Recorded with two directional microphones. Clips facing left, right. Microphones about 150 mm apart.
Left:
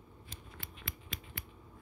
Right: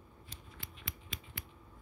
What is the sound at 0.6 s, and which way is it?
Scissors, 60° left (ahead or behind).